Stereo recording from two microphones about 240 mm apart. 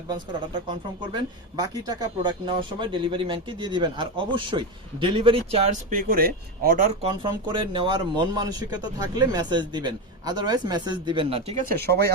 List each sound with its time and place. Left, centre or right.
0.7 s speech: centre; by 7.1 s right
7.2 s speech: centre
11.8 s speech: right